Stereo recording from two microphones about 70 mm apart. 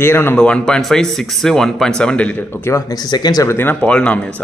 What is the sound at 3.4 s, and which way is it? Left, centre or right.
Speech, left.